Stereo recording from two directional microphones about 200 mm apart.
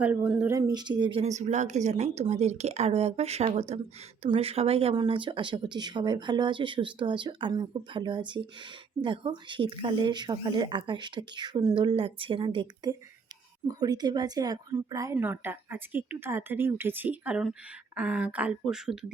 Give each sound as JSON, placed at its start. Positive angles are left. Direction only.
{"t": 0.0, "sound": "a woman's voice", "side_deg": -5}
{"t": 0.5, "sound": "a woman's voice", "side_deg": -20}